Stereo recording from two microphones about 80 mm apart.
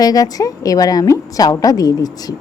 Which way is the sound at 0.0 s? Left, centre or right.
Left.